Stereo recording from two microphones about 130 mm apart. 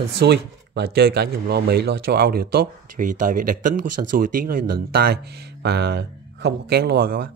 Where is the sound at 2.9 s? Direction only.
90° right.